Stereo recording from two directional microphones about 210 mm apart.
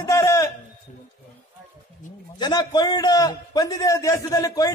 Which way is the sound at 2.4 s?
20° left (ahead or behind).